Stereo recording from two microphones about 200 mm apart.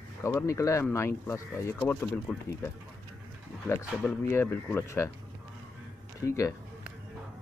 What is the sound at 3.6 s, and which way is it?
Speech, 10° left (ahead or behind).